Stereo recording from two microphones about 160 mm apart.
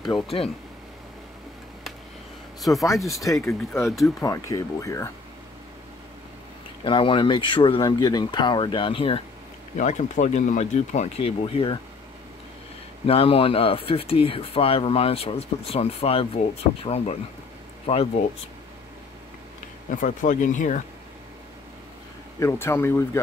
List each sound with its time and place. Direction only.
0.0 s speech: 35° left (ahead or behind)
2.7 s speech: 20° left (ahead or behind)
6.8 s speech: 30° left (ahead or behind)
9.8 s speech: 50° left (ahead or behind)
13.0 s speech: 35° left (ahead or behind)
19.9 s speech: 55° left (ahead or behind)
22.4 s speech: 15° left (ahead or behind)